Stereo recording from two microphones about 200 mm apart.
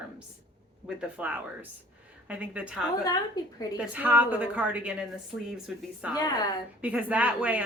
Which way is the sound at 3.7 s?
5° right (ahead or behind).